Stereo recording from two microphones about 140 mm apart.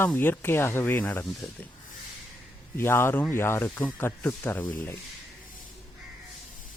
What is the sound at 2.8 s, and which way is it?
Speech, 15° left (ahead or behind).